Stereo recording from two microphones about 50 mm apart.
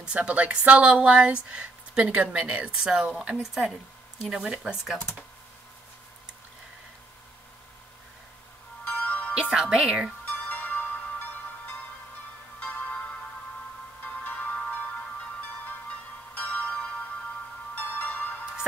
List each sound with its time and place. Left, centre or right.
0.0 s a woman's voice: right
2.7 s speech: centre
4.2 s speech: centre
8.8 s music: left
9.3 s speech: centre
10.2 s music: left
14.0 s music: left